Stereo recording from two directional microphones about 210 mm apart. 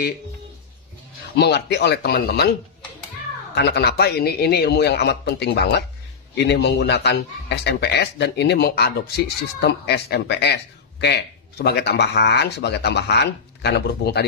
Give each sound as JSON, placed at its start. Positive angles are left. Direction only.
{"t": 1.3, "sound": "a man's voice", "side_deg": 55}
{"t": 3.5, "sound": "a man's voice", "side_deg": 55}